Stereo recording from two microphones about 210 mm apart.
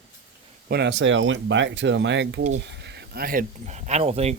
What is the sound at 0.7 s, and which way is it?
Speech, 55° right (ahead or behind).